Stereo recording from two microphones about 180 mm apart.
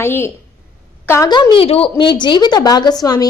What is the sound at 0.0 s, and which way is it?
A woman's voice, 15° left (ahead or behind).